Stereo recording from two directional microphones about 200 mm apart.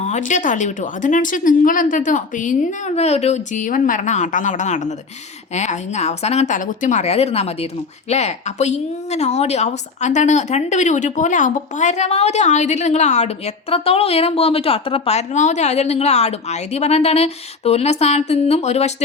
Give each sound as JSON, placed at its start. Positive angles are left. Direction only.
{"t": 0.0, "sound": "speech", "side_deg": 35}